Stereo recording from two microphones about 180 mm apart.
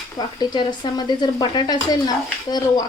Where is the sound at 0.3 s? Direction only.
25° left (ahead or behind).